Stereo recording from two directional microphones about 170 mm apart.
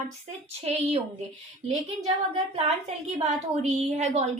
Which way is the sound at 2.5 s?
40° right (ahead or behind).